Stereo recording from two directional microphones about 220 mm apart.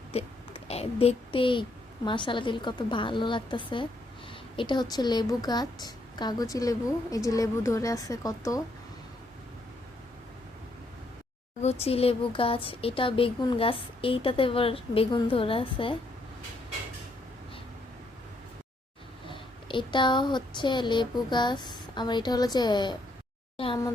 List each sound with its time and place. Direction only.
0.1 s a child's voice: 30° left (ahead or behind)
11.6 s speech: 30° left (ahead or behind)
19.3 s speech: 20° left (ahead or behind)